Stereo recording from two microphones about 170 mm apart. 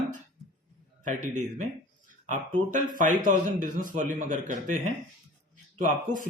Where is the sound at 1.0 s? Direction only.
50° right (ahead or behind).